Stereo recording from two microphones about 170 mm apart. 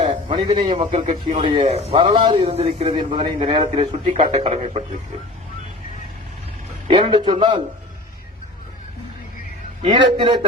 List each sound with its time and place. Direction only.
0.0 s a sound: 30° right (ahead or behind)
0.8 s a man's voice: 45° right (ahead or behind)
6.8 s a man's voice: 30° right (ahead or behind)
9.8 s a man's voice: 30° right (ahead or behind)